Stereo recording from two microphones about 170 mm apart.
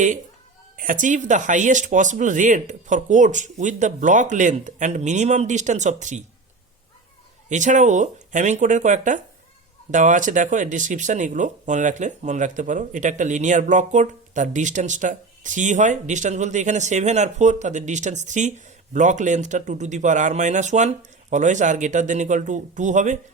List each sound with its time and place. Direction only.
0.8 s speech: 50° right (ahead or behind)
7.5 s speech: 45° right (ahead or behind)